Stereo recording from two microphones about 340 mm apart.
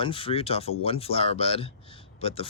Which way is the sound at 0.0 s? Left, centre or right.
Centre.